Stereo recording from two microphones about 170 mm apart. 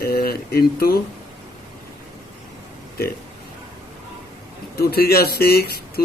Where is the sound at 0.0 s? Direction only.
65° left (ahead or behind).